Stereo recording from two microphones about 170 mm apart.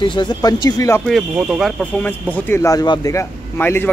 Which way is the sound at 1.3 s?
5° right (ahead or behind).